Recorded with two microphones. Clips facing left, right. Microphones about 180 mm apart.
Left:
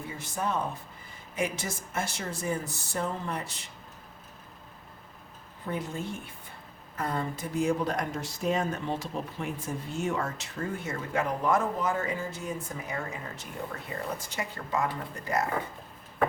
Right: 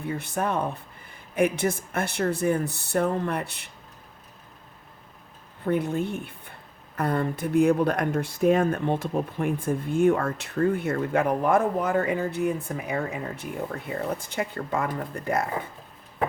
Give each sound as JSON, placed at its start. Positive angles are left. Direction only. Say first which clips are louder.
{"t": 0.0, "sound": "speech", "louder": "right 5 dB", "side_deg": -60}
{"t": 5.6, "sound": "speech", "louder": "right 9 dB", "side_deg": -60}